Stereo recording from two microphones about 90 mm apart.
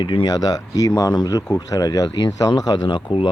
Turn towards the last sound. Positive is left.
turn(degrees=55)  # may be behind; listen again after turning